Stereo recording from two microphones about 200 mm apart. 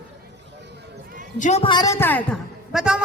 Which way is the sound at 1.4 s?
35° left (ahead or behind).